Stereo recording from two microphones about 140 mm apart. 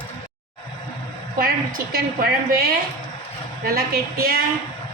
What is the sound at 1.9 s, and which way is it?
A woman's voice, 90° right.